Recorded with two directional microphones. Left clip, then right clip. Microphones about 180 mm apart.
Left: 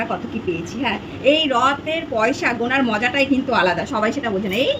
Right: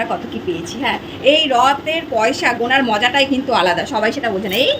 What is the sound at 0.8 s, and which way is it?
A woman's voice, 10° left (ahead or behind).